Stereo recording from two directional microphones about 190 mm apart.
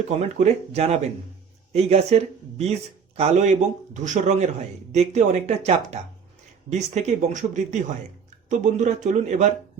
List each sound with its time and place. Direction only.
0.2 s speech: 35° right (ahead or behind)